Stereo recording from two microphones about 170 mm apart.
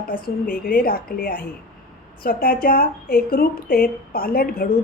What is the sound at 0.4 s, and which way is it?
A woman's voice, 55° left (ahead or behind).